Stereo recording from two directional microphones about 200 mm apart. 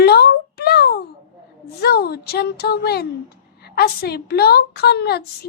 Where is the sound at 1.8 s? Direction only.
50° left (ahead or behind).